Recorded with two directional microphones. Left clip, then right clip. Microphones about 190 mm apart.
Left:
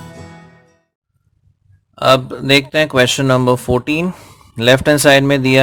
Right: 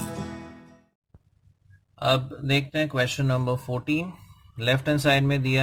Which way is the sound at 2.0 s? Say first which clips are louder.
Left 12 dB; 35° left (ahead or behind).